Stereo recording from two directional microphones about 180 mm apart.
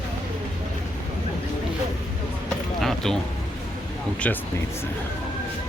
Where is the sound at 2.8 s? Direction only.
Centre (ahead or behind).